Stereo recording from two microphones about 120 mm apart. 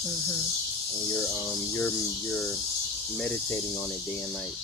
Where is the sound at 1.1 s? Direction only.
25° left (ahead or behind).